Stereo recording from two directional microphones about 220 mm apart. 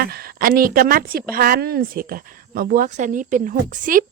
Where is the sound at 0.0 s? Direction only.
45° right (ahead or behind).